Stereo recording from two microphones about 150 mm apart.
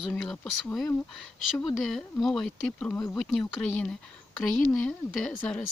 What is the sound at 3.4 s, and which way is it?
Speech, 5° left (ahead or behind).